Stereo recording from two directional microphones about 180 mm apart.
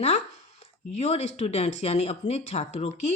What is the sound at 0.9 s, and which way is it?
Speech, 35° left (ahead or behind).